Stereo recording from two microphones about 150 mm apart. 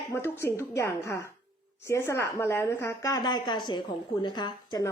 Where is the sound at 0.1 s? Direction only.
15° left (ahead or behind).